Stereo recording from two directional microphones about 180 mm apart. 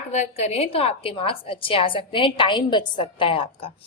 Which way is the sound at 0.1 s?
40° left (ahead or behind).